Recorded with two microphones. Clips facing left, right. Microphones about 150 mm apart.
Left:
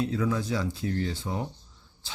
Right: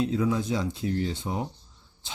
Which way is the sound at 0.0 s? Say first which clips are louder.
Right 2 dB; 20° right (ahead or behind).